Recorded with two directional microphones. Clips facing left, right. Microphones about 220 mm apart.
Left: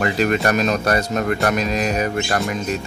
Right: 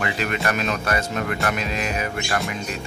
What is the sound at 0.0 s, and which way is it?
Speech, 40° left (ahead or behind).